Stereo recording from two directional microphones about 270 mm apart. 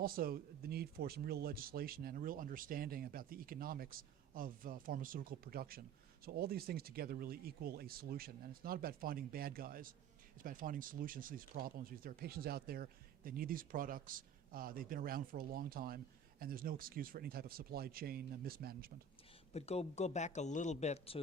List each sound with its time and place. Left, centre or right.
0.0 s speech: right
19.5 s speech: left